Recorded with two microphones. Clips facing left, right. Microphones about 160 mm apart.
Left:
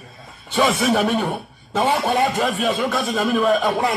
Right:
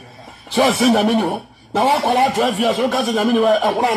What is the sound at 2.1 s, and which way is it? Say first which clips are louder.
Speech: right 3 dB; 80° right.